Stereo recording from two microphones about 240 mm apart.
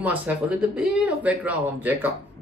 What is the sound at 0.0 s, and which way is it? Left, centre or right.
A man's voice, centre.